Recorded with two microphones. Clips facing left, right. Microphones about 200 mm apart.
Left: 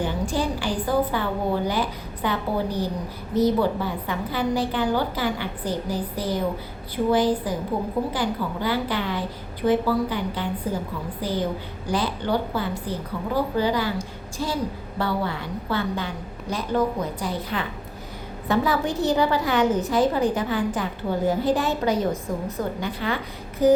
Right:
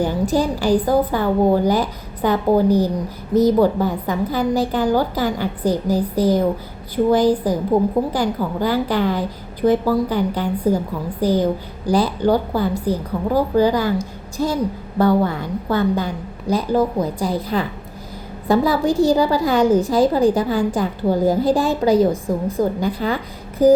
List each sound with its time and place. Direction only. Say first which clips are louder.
0.0 s a woman's voice: right 7 dB; 40° right (ahead or behind)